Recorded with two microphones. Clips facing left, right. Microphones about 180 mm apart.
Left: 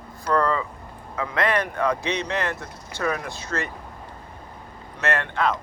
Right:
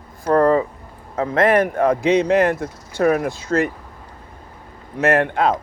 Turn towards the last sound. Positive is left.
turn(degrees=-50)  # may be behind; listen again after turning